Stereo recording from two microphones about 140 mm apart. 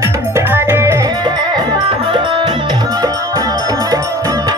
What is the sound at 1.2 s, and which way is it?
Music, 30° right (ahead or behind).